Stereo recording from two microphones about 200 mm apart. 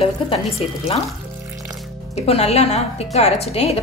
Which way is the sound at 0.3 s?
30° left (ahead or behind).